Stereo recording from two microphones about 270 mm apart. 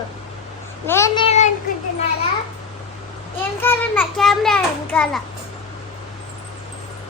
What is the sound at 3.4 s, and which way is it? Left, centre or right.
A child's voice, centre.